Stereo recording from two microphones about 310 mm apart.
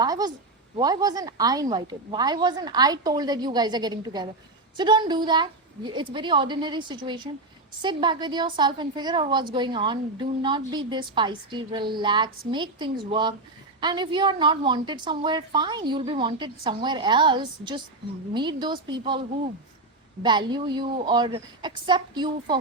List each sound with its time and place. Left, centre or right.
0.0 s a woman's voice: centre
20.2 s a woman's voice: centre